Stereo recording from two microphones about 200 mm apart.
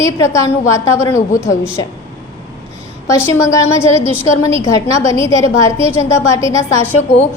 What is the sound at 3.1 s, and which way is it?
A woman's voice, 15° left (ahead or behind).